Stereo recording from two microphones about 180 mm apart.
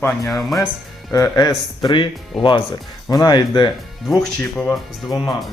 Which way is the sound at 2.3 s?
Centre (ahead or behind).